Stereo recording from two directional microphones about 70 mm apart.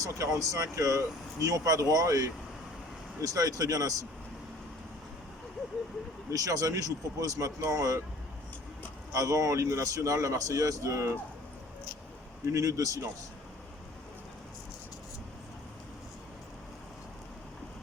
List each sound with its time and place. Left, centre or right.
0.0 s speech: right
6.3 s speech: right
9.1 s speech: right
12.5 s speech: right